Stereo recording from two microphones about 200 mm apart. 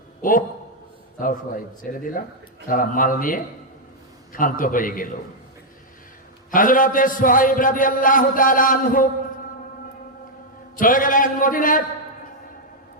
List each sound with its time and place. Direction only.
0.2 s a man's voice: 45° left (ahead or behind)
6.5 s a man's voice: 45° left (ahead or behind)
10.8 s a man's voice: 45° left (ahead or behind)